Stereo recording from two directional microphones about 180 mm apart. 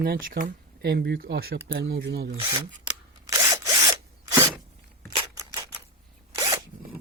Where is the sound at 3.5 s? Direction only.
20° right (ahead or behind).